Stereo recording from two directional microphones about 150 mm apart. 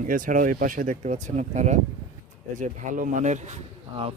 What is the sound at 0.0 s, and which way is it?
Speech, 65° right (ahead or behind).